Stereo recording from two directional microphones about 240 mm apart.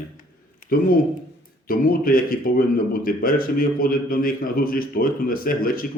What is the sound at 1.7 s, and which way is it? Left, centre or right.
A man's voice, left.